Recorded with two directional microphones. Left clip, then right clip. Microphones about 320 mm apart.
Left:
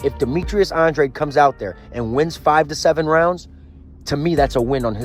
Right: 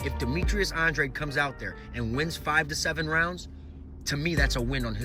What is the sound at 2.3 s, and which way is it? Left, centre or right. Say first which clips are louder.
Speech: left 10 dB; centre.